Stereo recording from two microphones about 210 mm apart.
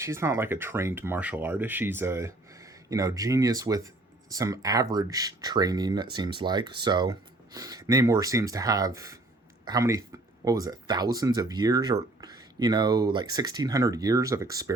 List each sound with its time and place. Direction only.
0.0 s speech: 15° right (ahead or behind)